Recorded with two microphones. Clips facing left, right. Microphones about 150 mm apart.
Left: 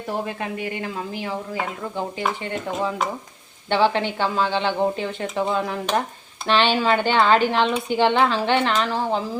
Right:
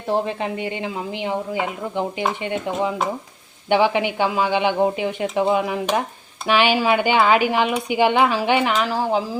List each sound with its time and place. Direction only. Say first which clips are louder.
0.1 s a woman's voice: right 6 dB; 25° right (ahead or behind); by 9.2 s 10° right (ahead or behind)